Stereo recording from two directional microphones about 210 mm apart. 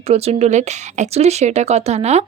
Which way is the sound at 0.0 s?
30° right (ahead or behind).